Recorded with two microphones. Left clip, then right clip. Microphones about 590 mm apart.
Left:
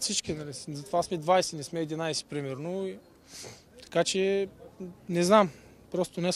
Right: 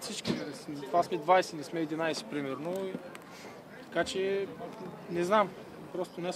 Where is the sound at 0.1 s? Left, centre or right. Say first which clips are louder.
Left 2 dB; left.